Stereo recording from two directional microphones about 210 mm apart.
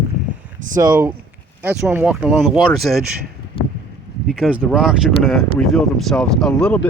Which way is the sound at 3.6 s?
25° left (ahead or behind).